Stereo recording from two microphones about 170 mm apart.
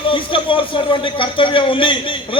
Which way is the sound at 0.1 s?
30° left (ahead or behind).